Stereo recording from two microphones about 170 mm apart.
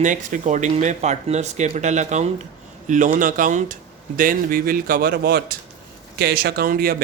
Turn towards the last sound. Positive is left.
turn(degrees=-60)  # may be behind; listen again after turning